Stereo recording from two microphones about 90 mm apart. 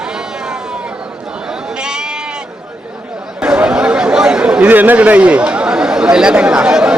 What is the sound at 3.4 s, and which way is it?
Chatter, 10° right (ahead or behind).